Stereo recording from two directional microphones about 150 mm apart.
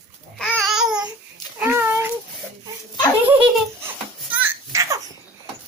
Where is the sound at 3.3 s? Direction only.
10° right (ahead or behind).